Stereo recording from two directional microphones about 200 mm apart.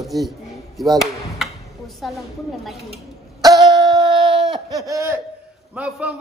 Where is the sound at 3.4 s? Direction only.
20° right (ahead or behind).